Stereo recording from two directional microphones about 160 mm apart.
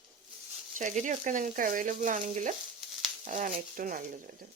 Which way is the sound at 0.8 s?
50° right (ahead or behind).